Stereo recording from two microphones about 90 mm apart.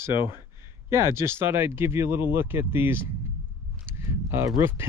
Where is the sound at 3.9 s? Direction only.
30° right (ahead or behind).